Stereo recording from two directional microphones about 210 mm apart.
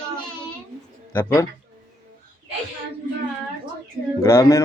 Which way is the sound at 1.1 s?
15° left (ahead or behind).